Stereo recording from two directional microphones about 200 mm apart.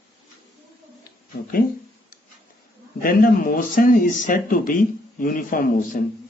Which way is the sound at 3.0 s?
45° left (ahead or behind).